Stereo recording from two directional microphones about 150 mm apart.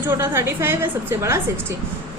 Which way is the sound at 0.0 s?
15° right (ahead or behind).